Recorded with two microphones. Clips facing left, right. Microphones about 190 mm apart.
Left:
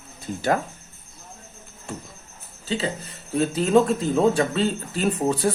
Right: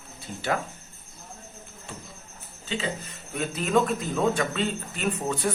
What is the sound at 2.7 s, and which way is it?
Speech, 35° left (ahead or behind).